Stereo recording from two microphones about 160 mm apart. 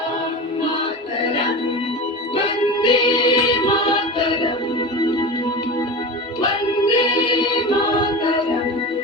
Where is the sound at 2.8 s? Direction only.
30° left (ahead or behind).